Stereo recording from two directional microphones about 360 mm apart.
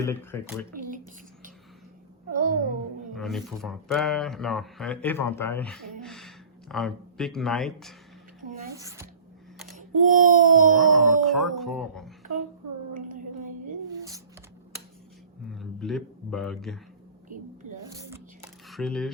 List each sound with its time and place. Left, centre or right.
0.0 s speech: centre
0.8 s a sound: right
2.3 s babbling: right
3.1 s speech: centre
9.7 s babbling: right
10.8 s speech: centre
12.9 s a sound: right
15.4 s speech: centre
17.8 s a sound: centre